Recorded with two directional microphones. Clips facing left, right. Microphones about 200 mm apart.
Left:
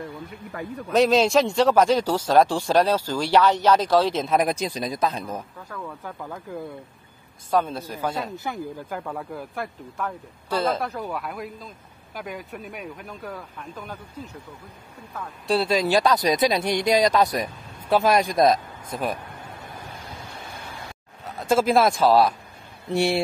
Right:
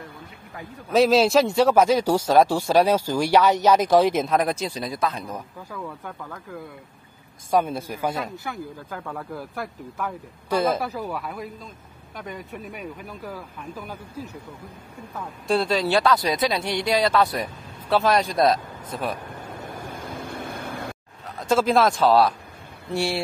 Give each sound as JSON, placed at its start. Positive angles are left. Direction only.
{"t": 0.9, "sound": "speech", "side_deg": 0}
{"t": 4.3, "sound": "speech", "side_deg": 15}
{"t": 5.7, "sound": "speech", "side_deg": -5}
{"t": 7.5, "sound": "speech", "side_deg": -10}
{"t": 8.5, "sound": "speech", "side_deg": 10}
{"t": 19.4, "sound": "vehicle", "side_deg": -50}
{"t": 21.4, "sound": "speech", "side_deg": 10}
{"t": 22.9, "sound": "a sound", "side_deg": 20}